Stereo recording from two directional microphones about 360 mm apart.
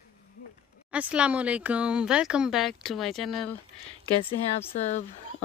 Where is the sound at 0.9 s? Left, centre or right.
Centre.